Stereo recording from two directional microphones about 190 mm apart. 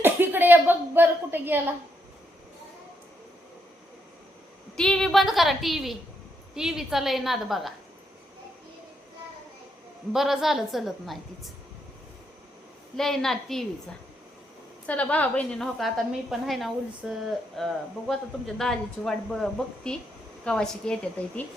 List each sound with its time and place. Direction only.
0.0 s a sound: 10° right (ahead or behind)
4.8 s a woman's voice: 5° left (ahead or behind)
10.1 s a woman's voice: centre (ahead or behind)
13.0 s a woman's voice: centre (ahead or behind)
14.8 s a woman's voice: 5° left (ahead or behind)